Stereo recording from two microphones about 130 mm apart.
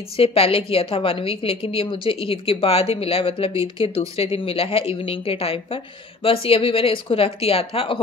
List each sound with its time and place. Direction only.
0.2 s a woman's voice: 45° left (ahead or behind)